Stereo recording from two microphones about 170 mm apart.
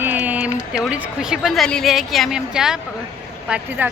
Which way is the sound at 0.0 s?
10° right (ahead or behind).